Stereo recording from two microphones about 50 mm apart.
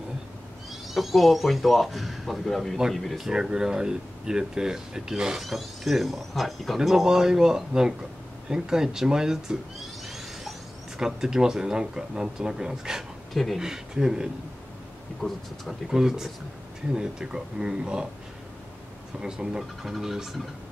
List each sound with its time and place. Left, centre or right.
0.9 s speech: centre
3.3 s speech: centre
5.4 s speech: centre
9.8 s a sound: centre
11.0 s speech: centre
13.3 s speech: centre
13.6 s speech: centre
15.2 s speech: centre
15.9 s speech: centre
19.1 s speech: centre